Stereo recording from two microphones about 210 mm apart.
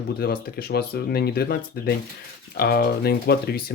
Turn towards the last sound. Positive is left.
turn(degrees=50)  # may be behind; listen again after turning